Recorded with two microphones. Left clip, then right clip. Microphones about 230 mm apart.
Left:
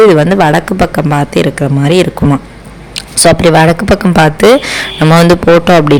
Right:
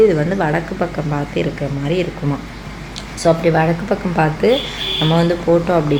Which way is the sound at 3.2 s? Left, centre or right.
Left.